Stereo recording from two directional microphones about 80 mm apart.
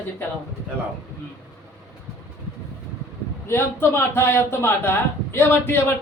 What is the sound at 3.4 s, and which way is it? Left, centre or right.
Speech, left.